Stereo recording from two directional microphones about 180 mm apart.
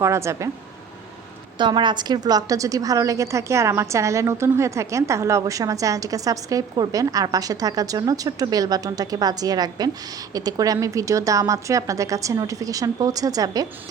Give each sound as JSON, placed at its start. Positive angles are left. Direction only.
{"t": 0.0, "sound": "speech", "side_deg": -15}
{"t": 1.5, "sound": "a woman's voice", "side_deg": -25}